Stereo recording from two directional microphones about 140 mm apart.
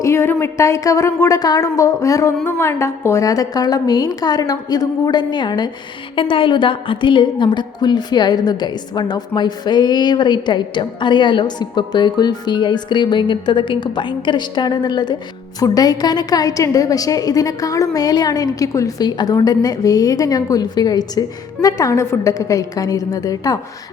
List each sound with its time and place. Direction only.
0.0 s a woman's voice: 20° left (ahead or behind)